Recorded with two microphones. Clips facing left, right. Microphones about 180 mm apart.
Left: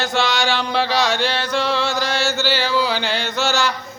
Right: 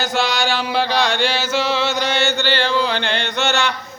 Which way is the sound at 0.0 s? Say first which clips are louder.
Even; centre (ahead or behind).